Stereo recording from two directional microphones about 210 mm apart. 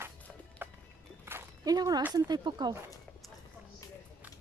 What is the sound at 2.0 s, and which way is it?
Speech, 20° right (ahead or behind).